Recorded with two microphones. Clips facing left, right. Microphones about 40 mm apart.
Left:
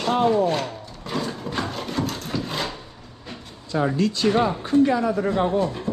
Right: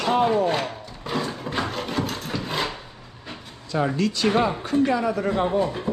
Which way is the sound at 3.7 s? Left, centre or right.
Right.